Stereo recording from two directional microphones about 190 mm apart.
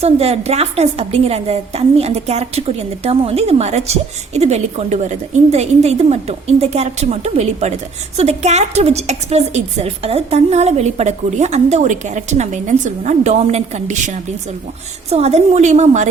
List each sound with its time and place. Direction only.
0.0 s a woman's voice: 30° right (ahead or behind)